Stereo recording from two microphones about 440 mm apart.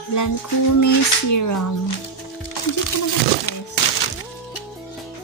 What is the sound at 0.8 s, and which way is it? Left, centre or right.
Music, left.